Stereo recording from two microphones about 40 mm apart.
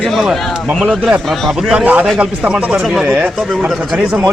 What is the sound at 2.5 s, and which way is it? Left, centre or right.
Speech, right.